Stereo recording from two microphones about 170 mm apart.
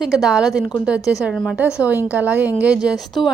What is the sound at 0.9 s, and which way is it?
Speech, 20° left (ahead or behind).